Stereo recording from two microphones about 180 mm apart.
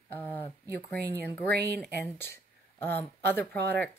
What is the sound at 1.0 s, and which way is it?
Speech, 60° right (ahead or behind).